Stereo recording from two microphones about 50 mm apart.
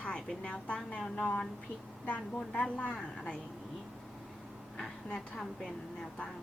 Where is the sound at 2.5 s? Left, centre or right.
Left.